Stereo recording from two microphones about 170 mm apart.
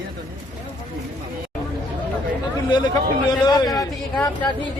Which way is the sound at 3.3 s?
25° left (ahead or behind).